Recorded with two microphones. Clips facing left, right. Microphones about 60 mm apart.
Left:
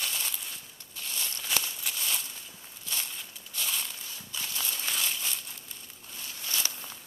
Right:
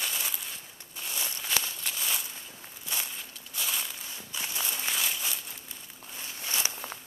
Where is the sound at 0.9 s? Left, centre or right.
Centre.